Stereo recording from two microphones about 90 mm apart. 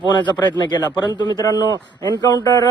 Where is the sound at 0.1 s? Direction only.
55° left (ahead or behind).